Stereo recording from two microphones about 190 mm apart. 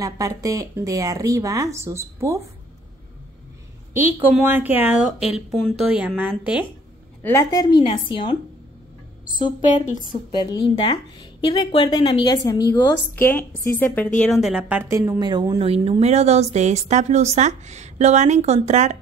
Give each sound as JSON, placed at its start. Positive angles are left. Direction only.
{"t": 0.0, "sound": "a woman's voice", "side_deg": -20}
{"t": 3.9, "sound": "a woman's voice", "side_deg": -10}
{"t": 7.2, "sound": "speech", "side_deg": 15}
{"t": 10.3, "sound": "speech", "side_deg": 25}
{"t": 12.7, "sound": "a woman's voice", "side_deg": 15}
{"t": 15.6, "sound": "speech", "side_deg": -30}